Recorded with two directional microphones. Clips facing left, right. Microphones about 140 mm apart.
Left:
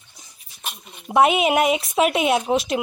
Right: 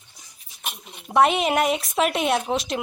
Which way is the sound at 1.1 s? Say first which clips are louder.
Left 2 dB; 5° left (ahead or behind).